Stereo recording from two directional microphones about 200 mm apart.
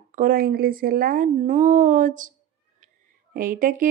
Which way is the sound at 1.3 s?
40° right (ahead or behind).